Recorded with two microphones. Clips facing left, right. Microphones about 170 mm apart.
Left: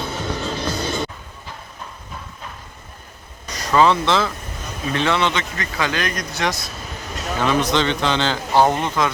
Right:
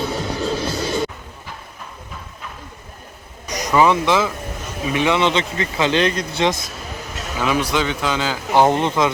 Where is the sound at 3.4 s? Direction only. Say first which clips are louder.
Even; 15° right (ahead or behind).